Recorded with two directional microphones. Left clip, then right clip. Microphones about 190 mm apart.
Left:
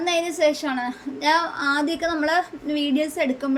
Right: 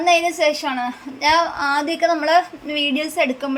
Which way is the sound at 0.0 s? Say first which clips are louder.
Right 5 dB; 20° right (ahead or behind).